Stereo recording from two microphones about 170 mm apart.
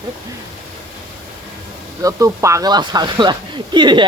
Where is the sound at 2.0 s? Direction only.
20° right (ahead or behind).